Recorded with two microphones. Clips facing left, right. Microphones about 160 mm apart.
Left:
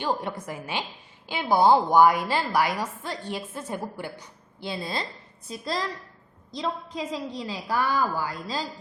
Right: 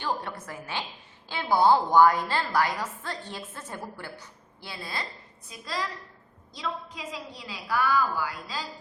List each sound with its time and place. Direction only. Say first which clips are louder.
0.0 s a woman's voice: left 4 dB; 20° left (ahead or behind)